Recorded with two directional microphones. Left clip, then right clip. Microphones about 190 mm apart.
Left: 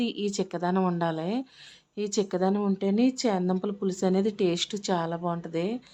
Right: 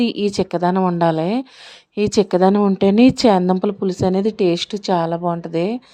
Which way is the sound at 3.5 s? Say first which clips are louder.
Right 10 dB; 30° right (ahead or behind).